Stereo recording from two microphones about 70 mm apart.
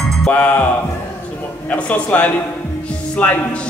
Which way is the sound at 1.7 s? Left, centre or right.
Left.